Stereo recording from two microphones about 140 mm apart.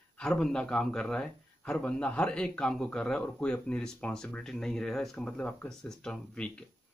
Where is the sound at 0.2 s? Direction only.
5° left (ahead or behind).